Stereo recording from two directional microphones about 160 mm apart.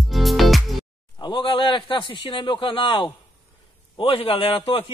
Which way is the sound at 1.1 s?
30° left (ahead or behind).